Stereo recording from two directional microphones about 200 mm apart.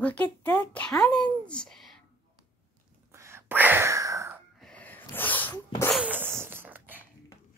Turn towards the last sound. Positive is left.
turn(degrees=-10)  # may be behind; listen again after turning